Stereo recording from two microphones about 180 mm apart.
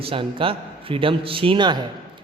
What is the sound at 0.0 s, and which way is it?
A man's voice, 30° right (ahead or behind).